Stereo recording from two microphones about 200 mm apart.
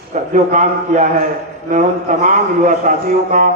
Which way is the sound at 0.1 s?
35° right (ahead or behind).